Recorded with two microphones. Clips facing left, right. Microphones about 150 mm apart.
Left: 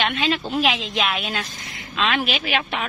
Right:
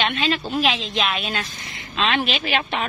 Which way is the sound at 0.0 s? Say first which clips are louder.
Even; 10° left (ahead or behind).